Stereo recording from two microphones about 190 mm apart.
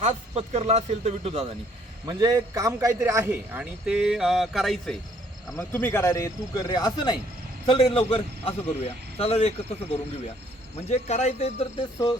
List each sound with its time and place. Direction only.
0.0 s speech: 35° right (ahead or behind)
2.0 s a man's voice: 20° right (ahead or behind); by 4.9 s centre (ahead or behind)
5.5 s a man's voice: 10° left (ahead or behind); by 11.9 s 35° left (ahead or behind)